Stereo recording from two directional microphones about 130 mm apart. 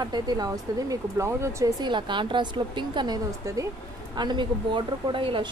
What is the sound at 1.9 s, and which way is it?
A woman's voice, 40° right (ahead or behind).